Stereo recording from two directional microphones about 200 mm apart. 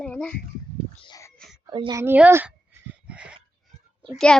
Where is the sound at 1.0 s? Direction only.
20° left (ahead or behind).